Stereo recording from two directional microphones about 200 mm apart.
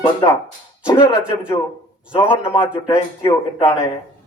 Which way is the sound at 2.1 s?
15° left (ahead or behind).